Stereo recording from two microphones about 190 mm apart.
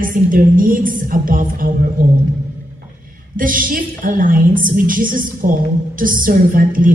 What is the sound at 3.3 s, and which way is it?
A woman's voice, 45° right (ahead or behind).